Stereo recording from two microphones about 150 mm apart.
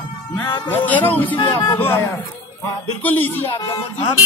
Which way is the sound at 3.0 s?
10° left (ahead or behind).